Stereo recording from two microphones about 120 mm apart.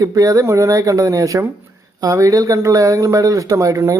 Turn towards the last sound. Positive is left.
turn(degrees=-25)  # may be behind; listen again after turning